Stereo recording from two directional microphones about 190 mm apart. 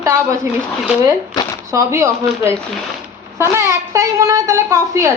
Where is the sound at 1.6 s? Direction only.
15° right (ahead or behind).